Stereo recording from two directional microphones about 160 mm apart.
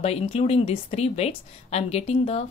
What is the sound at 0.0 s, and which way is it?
A woman's voice, 40° left (ahead or behind).